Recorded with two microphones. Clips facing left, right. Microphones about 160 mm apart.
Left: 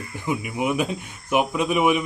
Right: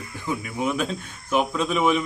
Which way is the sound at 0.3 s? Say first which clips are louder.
Left 2 dB; 15° left (ahead or behind).